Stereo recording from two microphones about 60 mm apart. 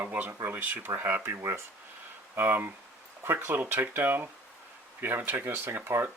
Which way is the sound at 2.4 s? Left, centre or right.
Right.